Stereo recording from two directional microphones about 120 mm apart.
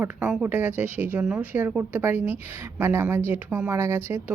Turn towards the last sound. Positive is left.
turn(degrees=-20)  # may be behind; listen again after turning